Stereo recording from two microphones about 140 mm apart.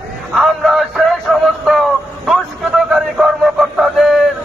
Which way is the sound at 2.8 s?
Centre (ahead or behind).